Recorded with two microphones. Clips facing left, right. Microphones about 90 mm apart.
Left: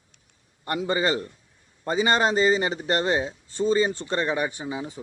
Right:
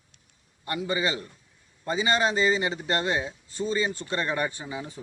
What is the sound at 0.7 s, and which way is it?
A man's voice, 40° left (ahead or behind).